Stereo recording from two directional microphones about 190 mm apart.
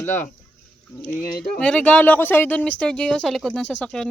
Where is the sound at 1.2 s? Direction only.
50° left (ahead or behind).